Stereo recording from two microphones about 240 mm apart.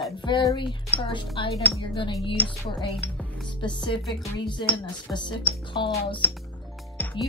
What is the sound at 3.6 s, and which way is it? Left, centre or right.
Speech, centre.